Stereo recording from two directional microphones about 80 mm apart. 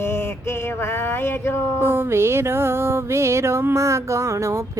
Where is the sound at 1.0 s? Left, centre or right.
Left.